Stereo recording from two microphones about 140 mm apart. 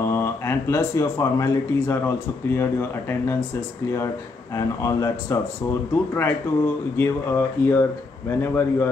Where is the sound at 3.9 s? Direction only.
20° left (ahead or behind).